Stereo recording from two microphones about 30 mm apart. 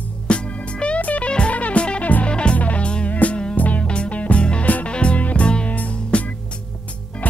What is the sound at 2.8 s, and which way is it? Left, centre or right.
Music, left.